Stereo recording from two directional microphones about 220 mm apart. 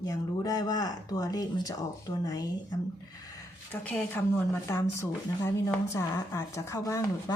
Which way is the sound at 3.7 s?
5° left (ahead or behind).